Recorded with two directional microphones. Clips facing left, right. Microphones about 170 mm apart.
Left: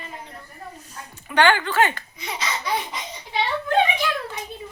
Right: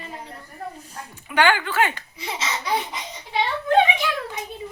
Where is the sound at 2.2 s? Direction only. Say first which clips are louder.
Right 2 dB; 30° right (ahead or behind).